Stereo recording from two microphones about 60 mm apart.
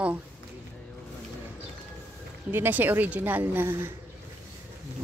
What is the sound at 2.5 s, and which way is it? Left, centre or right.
A woman's voice, right.